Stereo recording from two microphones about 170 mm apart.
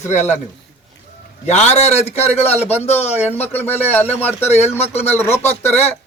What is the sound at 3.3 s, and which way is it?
Speech, 10° left (ahead or behind).